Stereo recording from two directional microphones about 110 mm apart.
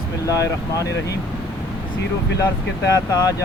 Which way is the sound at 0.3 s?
30° left (ahead or behind).